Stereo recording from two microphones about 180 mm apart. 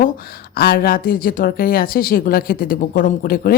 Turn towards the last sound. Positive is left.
turn(degrees=55)  # may be behind; listen again after turning